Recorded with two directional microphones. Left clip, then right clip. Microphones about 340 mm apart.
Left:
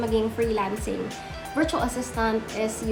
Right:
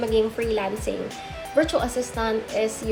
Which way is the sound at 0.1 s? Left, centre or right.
Centre.